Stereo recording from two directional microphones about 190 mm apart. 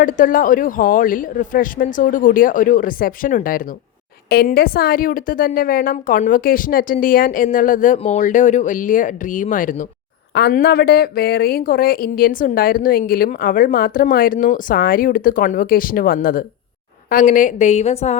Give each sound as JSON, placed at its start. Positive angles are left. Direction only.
{"t": 0.0, "sound": "speech", "side_deg": 45}
{"t": 10.3, "sound": "a woman's voice", "side_deg": 55}